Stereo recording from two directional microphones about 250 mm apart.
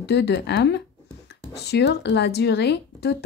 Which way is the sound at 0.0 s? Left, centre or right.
Left.